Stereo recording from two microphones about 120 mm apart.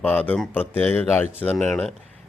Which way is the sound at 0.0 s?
15° left (ahead or behind).